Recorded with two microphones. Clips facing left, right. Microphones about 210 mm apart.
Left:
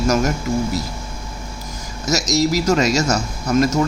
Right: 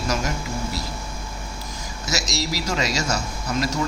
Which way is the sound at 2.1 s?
45° left (ahead or behind).